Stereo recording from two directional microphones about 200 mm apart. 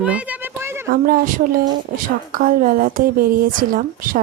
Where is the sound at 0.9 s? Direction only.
45° right (ahead or behind).